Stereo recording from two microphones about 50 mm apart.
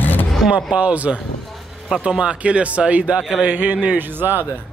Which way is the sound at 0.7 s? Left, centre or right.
Right.